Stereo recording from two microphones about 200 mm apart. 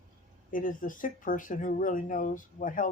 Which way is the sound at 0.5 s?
45° left (ahead or behind).